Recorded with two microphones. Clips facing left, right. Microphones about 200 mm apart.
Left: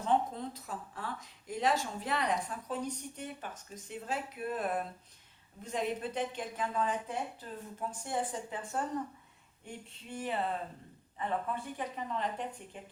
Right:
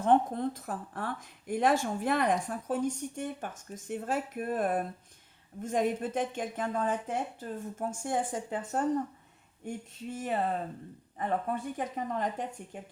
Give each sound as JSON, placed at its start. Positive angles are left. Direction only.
{"t": 0.0, "sound": "a woman's voice", "side_deg": -55}
{"t": 10.2, "sound": "a woman's voice", "side_deg": -45}